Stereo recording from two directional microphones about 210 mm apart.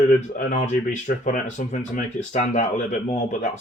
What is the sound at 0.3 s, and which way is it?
Speech, 35° left (ahead or behind).